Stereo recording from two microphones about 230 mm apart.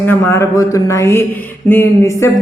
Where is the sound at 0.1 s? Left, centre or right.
Centre.